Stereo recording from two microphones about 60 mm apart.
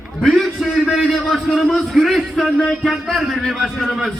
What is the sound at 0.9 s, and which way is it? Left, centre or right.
A man's voice, centre.